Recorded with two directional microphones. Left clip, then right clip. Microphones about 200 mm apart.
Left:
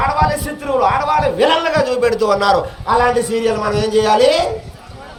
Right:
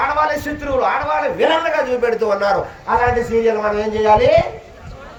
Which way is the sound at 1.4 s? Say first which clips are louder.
Left 2 dB; 40° left (ahead or behind).